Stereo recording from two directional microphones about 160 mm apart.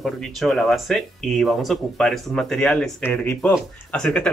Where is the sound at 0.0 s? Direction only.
Centre (ahead or behind).